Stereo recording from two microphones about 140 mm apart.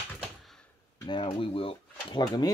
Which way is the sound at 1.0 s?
35° left (ahead or behind).